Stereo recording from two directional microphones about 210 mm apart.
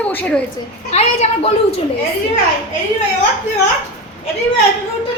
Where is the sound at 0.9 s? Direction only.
30° left (ahead or behind).